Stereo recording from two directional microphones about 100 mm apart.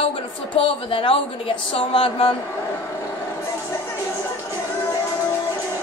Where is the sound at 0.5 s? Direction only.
65° left (ahead or behind).